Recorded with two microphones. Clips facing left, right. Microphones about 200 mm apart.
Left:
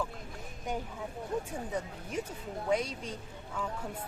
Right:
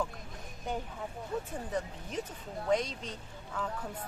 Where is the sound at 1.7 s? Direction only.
10° left (ahead or behind).